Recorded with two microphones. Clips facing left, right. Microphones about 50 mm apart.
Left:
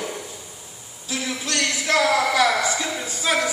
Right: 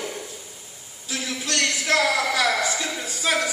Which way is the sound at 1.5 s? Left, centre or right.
Left.